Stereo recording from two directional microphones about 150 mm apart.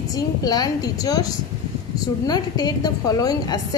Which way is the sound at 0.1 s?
25° left (ahead or behind).